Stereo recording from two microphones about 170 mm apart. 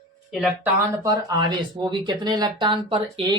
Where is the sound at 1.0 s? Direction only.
25° right (ahead or behind).